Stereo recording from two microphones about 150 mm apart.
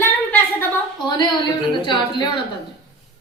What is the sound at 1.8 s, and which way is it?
Speech, 30° left (ahead or behind).